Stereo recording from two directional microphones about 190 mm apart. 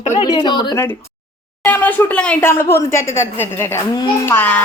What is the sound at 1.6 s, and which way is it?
A woman's voice, 10° left (ahead or behind).